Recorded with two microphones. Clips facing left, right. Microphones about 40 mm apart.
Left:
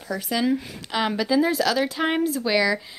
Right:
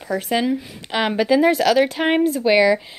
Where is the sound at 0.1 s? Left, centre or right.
Right.